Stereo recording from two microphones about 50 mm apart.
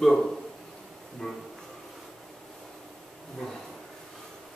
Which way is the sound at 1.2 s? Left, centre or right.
Centre.